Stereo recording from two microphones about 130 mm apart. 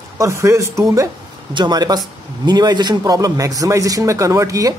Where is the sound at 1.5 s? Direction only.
35° right (ahead or behind).